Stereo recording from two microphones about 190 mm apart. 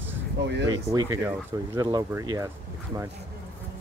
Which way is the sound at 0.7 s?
15° right (ahead or behind).